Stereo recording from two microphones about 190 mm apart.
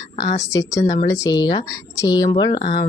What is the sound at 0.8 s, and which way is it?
Speech, 40° left (ahead or behind).